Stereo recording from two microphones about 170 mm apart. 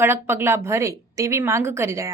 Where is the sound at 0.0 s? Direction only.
15° right (ahead or behind).